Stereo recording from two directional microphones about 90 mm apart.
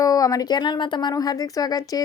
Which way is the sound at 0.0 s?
40° left (ahead or behind).